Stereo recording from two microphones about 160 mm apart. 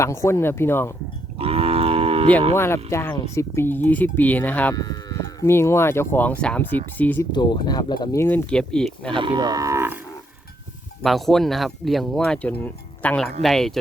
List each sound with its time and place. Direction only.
0.0 s speech: 15° left (ahead or behind)
1.4 s livestock: 40° right (ahead or behind)
2.6 s speech: 15° left (ahead or behind)
4.7 s speech: 25° left (ahead or behind)
7.3 s speech: 25° left (ahead or behind)
8.2 s speech: 15° left (ahead or behind)
9.1 s livestock: 30° right (ahead or behind)
11.0 s speech: centre (ahead or behind)